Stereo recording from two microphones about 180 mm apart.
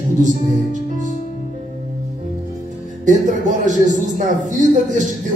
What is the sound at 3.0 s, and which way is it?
Speech, 45° right (ahead or behind).